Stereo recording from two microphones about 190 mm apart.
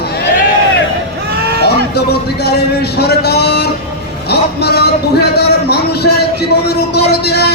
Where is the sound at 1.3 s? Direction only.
60° right (ahead or behind).